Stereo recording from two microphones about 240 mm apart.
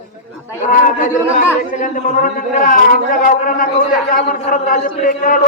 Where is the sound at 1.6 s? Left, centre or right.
Left.